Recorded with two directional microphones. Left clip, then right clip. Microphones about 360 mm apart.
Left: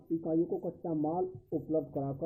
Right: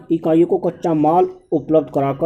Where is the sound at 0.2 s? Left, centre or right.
Right.